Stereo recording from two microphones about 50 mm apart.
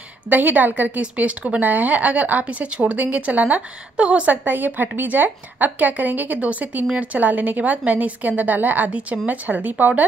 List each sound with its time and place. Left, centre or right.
0.3 s a woman's voice: right
4.5 s a woman's voice: right